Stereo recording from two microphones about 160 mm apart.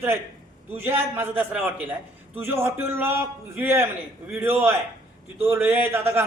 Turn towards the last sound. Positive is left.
turn(degrees=-15)  # may be behind; listen again after turning